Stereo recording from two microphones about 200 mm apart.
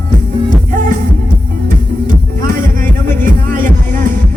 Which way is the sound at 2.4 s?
45° right (ahead or behind).